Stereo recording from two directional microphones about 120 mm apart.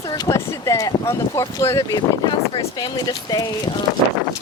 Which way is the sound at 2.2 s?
45° left (ahead or behind).